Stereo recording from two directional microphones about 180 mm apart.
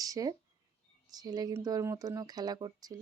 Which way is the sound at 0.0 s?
20° right (ahead or behind).